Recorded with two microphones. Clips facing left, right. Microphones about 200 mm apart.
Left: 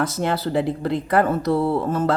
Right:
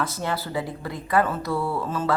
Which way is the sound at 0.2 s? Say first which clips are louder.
Left 6 dB; 75° left (ahead or behind).